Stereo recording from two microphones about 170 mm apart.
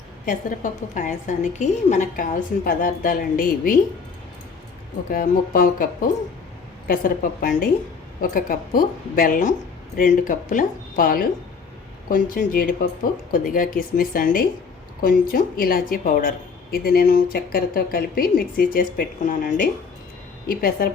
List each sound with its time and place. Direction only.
0.3 s a woman's voice: 50° left (ahead or behind)
5.1 s speech: 55° left (ahead or behind)